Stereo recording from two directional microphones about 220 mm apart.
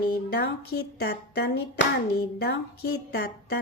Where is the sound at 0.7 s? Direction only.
50° left (ahead or behind).